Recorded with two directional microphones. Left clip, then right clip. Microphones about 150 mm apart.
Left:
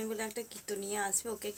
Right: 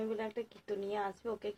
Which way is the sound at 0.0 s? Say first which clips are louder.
Even; 15° left (ahead or behind).